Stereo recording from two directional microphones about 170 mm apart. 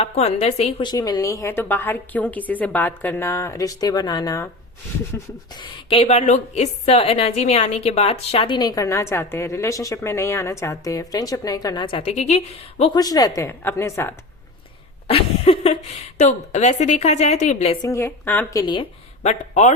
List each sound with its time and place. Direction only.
0.0 s speech: 40° left (ahead or behind)
0.9 s a woman's voice: 20° left (ahead or behind)
5.9 s a woman's voice: 40° left (ahead or behind)
12.8 s a woman's voice: 25° left (ahead or behind)
15.0 s a woman's voice: 35° left (ahead or behind)
17.8 s a woman's voice: 15° left (ahead or behind)
18.6 s a woman's voice: 25° left (ahead or behind)
19.2 s speech: 45° left (ahead or behind)